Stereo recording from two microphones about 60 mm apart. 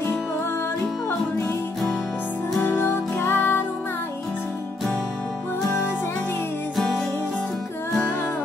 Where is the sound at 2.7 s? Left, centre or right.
Left.